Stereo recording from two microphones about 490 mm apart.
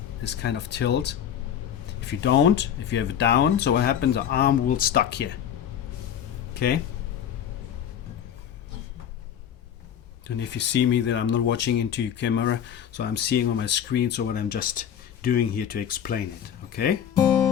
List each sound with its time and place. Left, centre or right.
0.2 s speech: left
6.5 s music: centre
10.2 s speech: left